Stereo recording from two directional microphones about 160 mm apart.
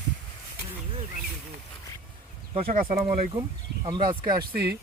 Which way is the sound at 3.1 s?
35° right (ahead or behind).